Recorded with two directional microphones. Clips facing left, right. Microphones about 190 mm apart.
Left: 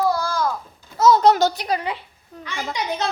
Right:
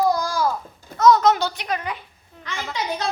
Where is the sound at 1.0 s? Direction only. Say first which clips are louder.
Left 1 dB; 30° left (ahead or behind).